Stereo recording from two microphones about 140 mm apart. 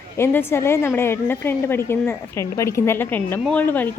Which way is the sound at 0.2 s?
20° left (ahead or behind).